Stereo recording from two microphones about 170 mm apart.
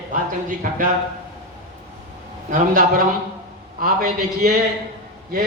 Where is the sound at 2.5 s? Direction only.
55° right (ahead or behind).